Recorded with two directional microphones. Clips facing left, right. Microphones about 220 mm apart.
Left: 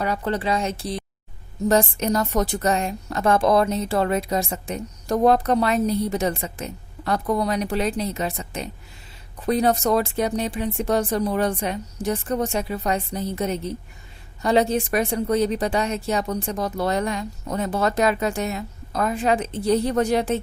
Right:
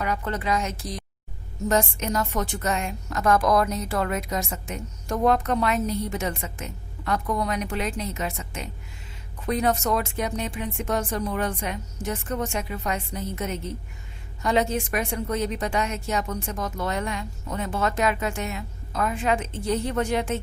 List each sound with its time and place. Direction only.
0.0 s a woman's voice: 30° left (ahead or behind)